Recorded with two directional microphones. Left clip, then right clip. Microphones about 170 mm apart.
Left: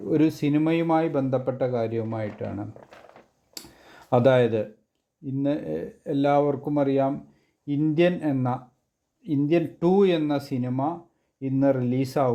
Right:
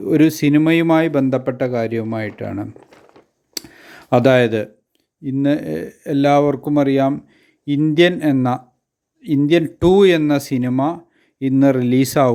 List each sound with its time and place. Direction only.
0.0 s a man's voice: 30° right (ahead or behind)
3.5 s a sound: 20° right (ahead or behind)
5.2 s a man's voice: 25° right (ahead or behind)